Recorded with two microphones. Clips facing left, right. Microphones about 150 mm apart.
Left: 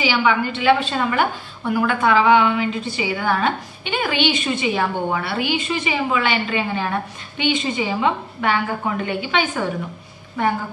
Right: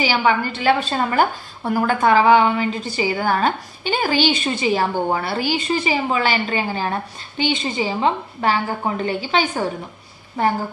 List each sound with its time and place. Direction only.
0.0 s a woman's voice: 40° right (ahead or behind)